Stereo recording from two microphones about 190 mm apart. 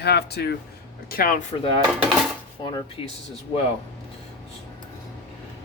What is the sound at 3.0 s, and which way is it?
Speech, 30° left (ahead or behind).